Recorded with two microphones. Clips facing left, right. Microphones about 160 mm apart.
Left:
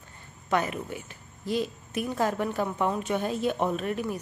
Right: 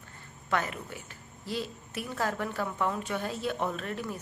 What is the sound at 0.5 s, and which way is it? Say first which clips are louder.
A woman's voice: left 4 dB; 20° left (ahead or behind).